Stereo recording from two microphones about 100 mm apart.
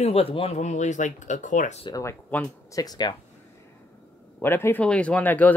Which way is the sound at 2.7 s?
40° left (ahead or behind).